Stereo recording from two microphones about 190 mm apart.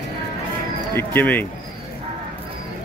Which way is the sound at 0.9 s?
10° left (ahead or behind).